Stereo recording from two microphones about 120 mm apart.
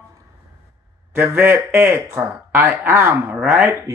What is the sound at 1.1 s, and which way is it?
Speech, 20° right (ahead or behind).